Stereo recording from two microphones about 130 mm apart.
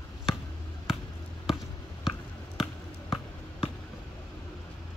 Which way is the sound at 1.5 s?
5° right (ahead or behind).